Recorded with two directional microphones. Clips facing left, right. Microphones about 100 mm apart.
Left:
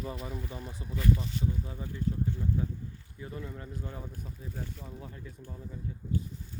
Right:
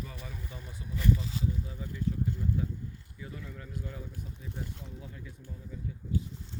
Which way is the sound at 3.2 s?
30° left (ahead or behind).